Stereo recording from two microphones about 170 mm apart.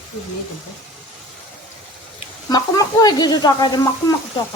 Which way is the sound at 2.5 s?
25° left (ahead or behind).